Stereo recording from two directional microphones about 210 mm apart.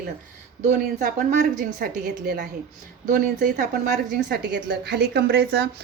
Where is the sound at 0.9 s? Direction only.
40° right (ahead or behind).